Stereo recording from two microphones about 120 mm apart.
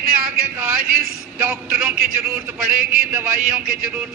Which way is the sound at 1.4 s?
10° right (ahead or behind).